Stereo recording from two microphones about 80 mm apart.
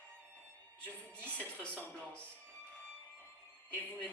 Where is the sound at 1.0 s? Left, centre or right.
Centre.